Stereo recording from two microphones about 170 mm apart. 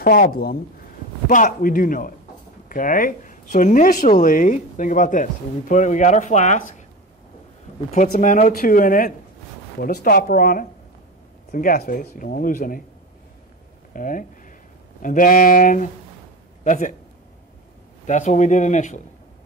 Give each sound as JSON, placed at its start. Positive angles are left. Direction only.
{"t": 0.0, "sound": "speech", "side_deg": 60}
{"t": 8.1, "sound": "speech", "side_deg": 50}
{"t": 13.9, "sound": "speech", "side_deg": 50}
{"t": 18.0, "sound": "speech", "side_deg": 45}